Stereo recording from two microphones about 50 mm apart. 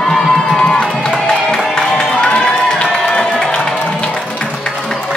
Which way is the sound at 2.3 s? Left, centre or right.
Centre.